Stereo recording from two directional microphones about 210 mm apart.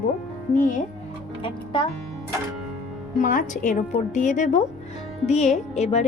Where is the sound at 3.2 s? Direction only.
35° left (ahead or behind).